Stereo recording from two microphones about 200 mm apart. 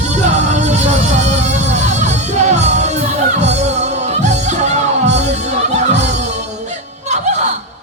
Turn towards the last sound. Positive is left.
turn(degrees=-35)  # may be behind; listen again after turning